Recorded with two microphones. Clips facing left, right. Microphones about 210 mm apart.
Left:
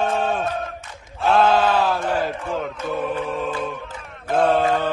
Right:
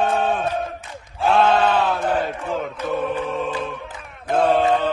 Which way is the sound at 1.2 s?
Centre (ahead or behind).